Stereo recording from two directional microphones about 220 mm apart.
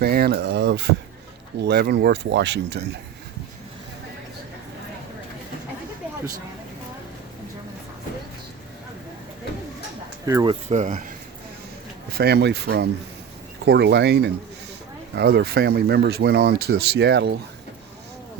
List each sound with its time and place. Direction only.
0.0 s speech: 45° right (ahead or behind)
10.2 s speech: 20° right (ahead or behind); by 11.1 s 35° right (ahead or behind)
12.1 s speech: 45° right (ahead or behind)